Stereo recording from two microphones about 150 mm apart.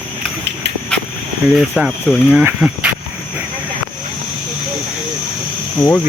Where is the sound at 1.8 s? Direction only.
5° right (ahead or behind).